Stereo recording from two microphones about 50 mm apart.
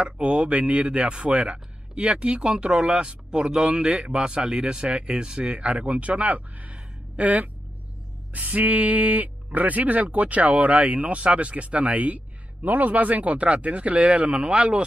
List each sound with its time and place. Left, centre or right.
0.0 s speech: right